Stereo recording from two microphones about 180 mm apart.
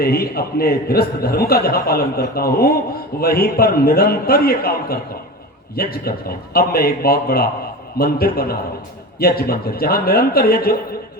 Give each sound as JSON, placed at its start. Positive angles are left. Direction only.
{"t": 0.0, "sound": "a man's voice", "side_deg": 60}